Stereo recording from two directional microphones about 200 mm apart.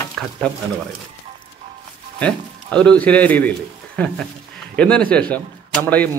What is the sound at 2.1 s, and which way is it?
A man's voice, 5° left (ahead or behind).